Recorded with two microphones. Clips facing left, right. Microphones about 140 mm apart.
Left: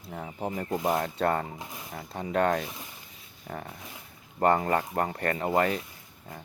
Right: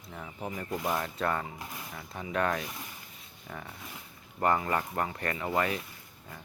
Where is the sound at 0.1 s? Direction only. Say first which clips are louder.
Left 5 dB; 40° left (ahead or behind).